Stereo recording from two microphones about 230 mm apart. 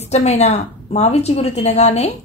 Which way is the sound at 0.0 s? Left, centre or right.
Left.